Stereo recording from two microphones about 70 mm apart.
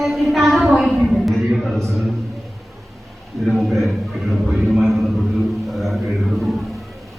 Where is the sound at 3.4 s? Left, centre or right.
Centre.